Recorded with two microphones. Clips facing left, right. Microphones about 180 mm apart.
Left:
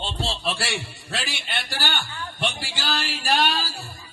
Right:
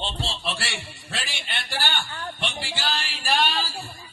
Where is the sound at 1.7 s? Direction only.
45° right (ahead or behind).